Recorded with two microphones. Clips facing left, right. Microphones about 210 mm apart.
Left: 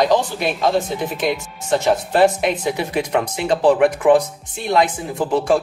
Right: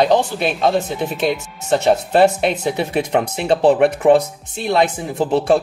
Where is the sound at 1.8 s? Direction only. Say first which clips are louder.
Right 2 dB; 25° right (ahead or behind).